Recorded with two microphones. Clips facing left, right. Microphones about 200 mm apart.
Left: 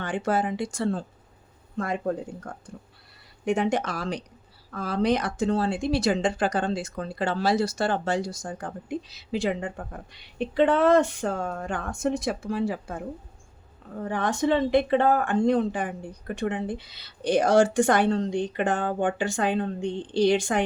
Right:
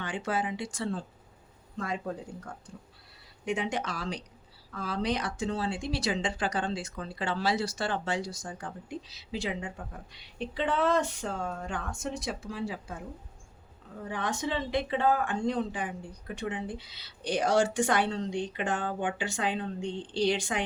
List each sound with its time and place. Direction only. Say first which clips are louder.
0.0 s speech: left 6 dB; 45° left (ahead or behind)
14.0 s speech: left 7 dB; 50° left (ahead or behind)